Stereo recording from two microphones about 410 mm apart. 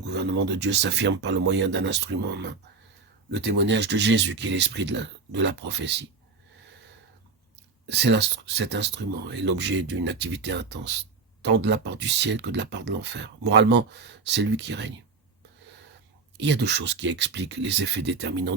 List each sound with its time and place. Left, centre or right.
0.0 s speech: right
3.6 s speech: right
7.9 s speech: right
16.4 s speech: right